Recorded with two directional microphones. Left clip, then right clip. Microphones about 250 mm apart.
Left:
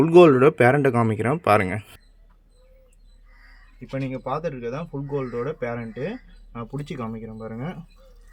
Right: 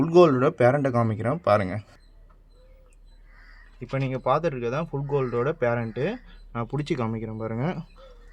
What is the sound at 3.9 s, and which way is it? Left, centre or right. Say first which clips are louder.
Speech: right 4 dB; right.